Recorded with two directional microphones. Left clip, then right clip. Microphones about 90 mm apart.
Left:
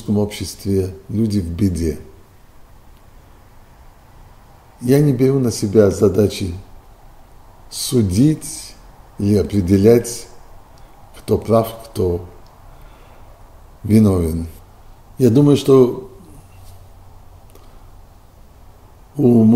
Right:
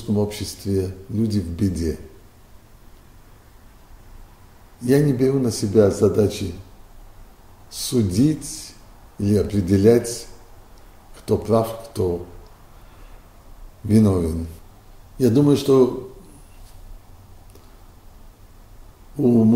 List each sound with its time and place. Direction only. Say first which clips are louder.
0.1 s speech: left 3 dB; 15° left (ahead or behind)
4.7 s speech: left 3 dB; 15° left (ahead or behind)
7.7 s speech: left 4 dB; 15° left (ahead or behind)
13.8 s a man's voice: left 3 dB; 15° left (ahead or behind)
19.1 s speech: left 4 dB; 20° left (ahead or behind)